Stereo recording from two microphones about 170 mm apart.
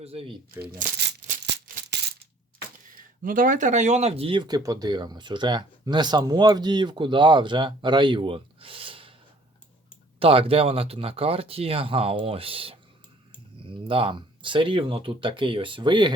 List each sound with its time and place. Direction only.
0.0 s speech: 35° right (ahead or behind)
1.5 s music: 90° right
2.9 s speech: 55° right (ahead or behind); by 9.1 s 30° right (ahead or behind)
10.2 s speech: 35° right (ahead or behind)